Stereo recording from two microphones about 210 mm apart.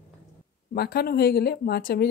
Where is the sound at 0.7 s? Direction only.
45° left (ahead or behind).